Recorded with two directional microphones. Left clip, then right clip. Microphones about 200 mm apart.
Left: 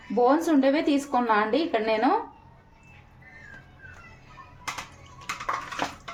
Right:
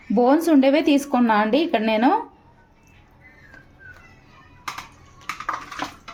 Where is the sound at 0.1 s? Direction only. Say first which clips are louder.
Right 4 dB; 35° right (ahead or behind).